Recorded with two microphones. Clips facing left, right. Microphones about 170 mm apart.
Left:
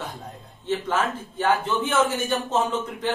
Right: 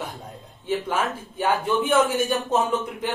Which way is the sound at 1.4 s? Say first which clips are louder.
Even; 10° right (ahead or behind).